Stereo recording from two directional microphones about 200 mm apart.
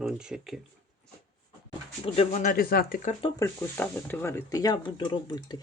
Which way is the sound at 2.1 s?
40° left (ahead or behind).